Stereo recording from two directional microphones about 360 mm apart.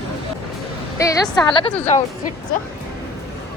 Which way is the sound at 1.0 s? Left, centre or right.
Centre.